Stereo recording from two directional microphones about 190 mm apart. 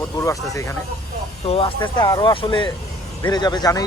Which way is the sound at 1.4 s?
30° left (ahead or behind).